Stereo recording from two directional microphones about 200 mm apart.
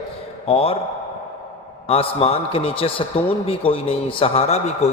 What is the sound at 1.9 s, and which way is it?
A man's voice, 30° left (ahead or behind).